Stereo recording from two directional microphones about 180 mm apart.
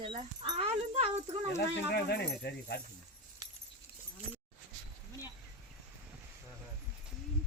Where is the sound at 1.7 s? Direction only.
65° left (ahead or behind).